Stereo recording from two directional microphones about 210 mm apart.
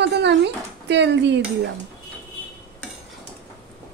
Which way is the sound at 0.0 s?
55° right (ahead or behind).